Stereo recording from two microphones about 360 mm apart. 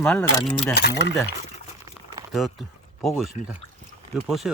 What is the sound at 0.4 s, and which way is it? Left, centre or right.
Speech, left.